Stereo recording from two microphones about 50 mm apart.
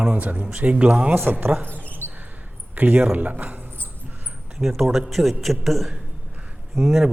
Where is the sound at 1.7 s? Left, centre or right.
Left.